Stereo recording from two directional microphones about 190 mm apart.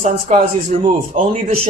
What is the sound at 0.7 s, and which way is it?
Speech, 40° right (ahead or behind).